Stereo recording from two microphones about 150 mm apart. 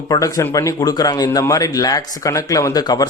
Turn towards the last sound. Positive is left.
turn(degrees=25)  # may be behind; listen again after turning